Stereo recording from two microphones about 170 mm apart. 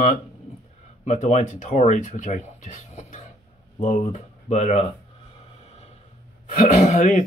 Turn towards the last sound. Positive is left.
turn(degrees=50)  # may be behind; listen again after turning